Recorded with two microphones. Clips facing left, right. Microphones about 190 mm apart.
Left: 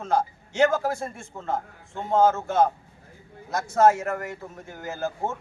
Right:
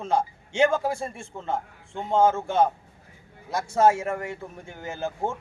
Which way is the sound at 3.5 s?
30° right (ahead or behind).